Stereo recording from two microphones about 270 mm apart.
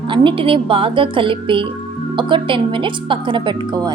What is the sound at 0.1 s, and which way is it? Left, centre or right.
A woman's voice, centre.